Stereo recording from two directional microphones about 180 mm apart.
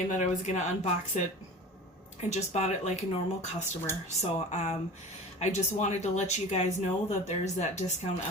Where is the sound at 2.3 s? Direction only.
40° left (ahead or behind).